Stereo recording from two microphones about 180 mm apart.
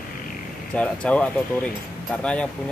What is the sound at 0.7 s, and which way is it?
Speech, 5° left (ahead or behind).